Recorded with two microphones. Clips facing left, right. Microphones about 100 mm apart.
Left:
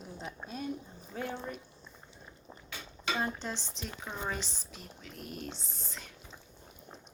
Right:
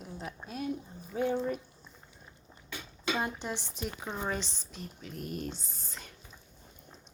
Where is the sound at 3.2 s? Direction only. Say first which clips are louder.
Right 1 dB; 15° right (ahead or behind).